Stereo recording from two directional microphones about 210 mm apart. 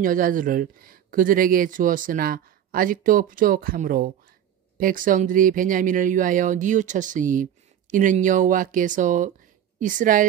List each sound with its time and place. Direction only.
0.0 s speech: 40° right (ahead or behind)